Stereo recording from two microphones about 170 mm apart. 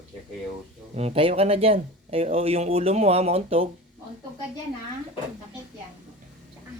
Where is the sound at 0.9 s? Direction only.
35° right (ahead or behind).